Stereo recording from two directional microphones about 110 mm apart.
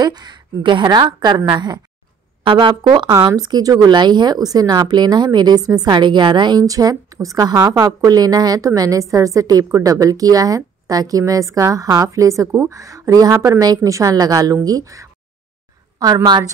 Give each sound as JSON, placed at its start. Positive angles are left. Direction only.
{"t": 0.0, "sound": "speech", "side_deg": -40}
{"t": 16.3, "sound": "speech", "side_deg": -40}